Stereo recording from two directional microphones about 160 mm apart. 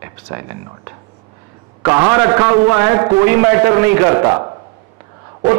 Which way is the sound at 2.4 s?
15° right (ahead or behind).